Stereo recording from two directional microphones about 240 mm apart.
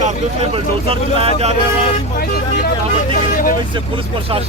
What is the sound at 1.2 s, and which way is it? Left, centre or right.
Speech, right.